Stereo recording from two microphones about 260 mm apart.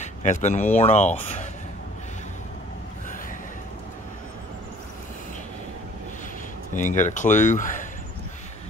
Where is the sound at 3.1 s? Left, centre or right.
Left.